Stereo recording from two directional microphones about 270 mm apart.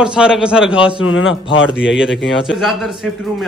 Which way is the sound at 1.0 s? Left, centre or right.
Left.